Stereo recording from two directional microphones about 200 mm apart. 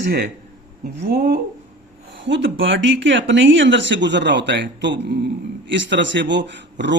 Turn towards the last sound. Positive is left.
turn(degrees=-60)  # may be behind; listen again after turning